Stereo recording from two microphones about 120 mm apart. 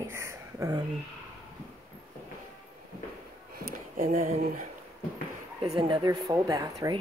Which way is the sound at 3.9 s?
75° right (ahead or behind).